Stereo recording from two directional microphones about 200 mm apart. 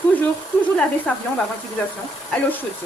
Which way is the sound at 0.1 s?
5° left (ahead or behind).